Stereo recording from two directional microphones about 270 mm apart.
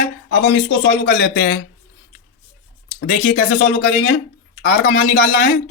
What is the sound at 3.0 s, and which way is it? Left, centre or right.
Speech, left.